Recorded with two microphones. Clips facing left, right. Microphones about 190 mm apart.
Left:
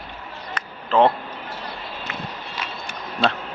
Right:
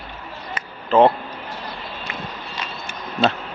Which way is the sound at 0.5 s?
5° right (ahead or behind).